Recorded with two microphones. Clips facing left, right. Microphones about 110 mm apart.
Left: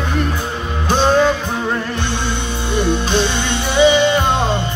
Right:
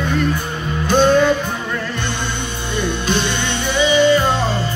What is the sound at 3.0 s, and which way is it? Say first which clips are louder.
Music: left 2 dB; 55° right (ahead or behind).